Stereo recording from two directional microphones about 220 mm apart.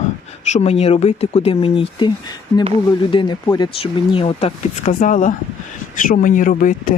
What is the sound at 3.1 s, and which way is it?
Speech, 20° left (ahead or behind).